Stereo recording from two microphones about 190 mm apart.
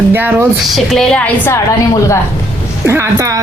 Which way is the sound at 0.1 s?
10° right (ahead or behind).